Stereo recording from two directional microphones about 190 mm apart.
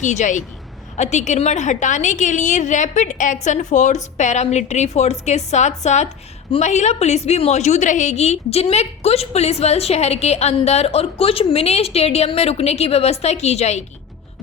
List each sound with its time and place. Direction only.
0.0 s a woman's voice: 40° left (ahead or behind)